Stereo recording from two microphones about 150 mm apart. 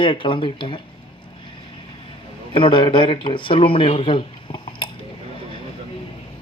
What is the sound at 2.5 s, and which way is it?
Speech, 35° left (ahead or behind).